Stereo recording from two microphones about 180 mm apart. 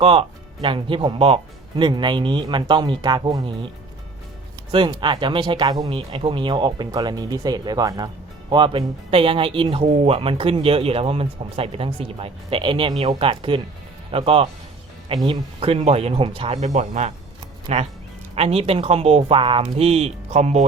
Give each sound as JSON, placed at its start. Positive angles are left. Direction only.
{"t": 0.0, "sound": "speech", "side_deg": -30}
{"t": 4.7, "sound": "speech", "side_deg": -25}